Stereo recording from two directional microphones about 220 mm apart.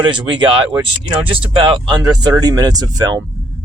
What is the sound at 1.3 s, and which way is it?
Speech, 25° right (ahead or behind).